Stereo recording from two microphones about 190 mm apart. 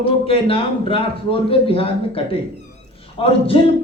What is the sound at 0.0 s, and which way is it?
A man's voice, 30° left (ahead or behind).